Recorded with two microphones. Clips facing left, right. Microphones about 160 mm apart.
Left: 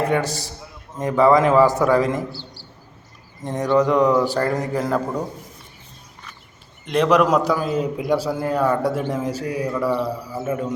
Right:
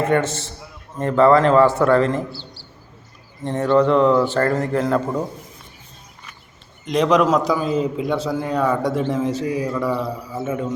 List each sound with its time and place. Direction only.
0.3 s a man's voice: 40° left (ahead or behind)
0.9 s a man's voice: 10° left (ahead or behind)
6.8 s a man's voice: 5° left (ahead or behind)